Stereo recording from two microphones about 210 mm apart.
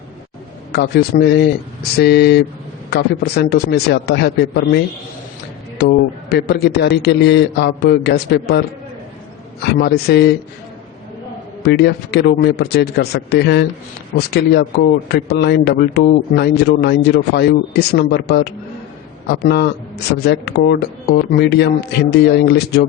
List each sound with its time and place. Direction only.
0.7 s a man's voice: 50° left (ahead or behind)
9.7 s a man's voice: 50° left (ahead or behind)
11.6 s a man's voice: 50° left (ahead or behind)